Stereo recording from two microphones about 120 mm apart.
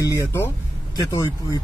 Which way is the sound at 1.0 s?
25° left (ahead or behind).